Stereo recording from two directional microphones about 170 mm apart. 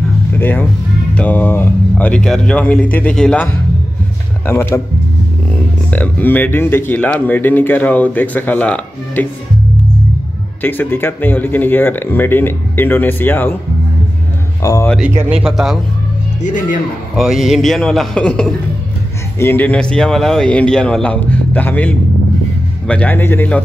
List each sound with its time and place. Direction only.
0.4 s speech: 10° left (ahead or behind)
5.9 s speech: 10° left (ahead or behind)
10.6 s speech: 10° left (ahead or behind)
14.6 s speech: 20° left (ahead or behind)
15.0 s a man's voice: 10° right (ahead or behind)
16.4 s speech: 50° left (ahead or behind)
17.1 s a man's voice: centre (ahead or behind)